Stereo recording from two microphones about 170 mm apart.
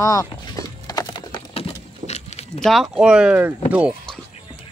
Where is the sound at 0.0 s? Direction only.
20° left (ahead or behind); by 2.4 s 40° left (ahead or behind).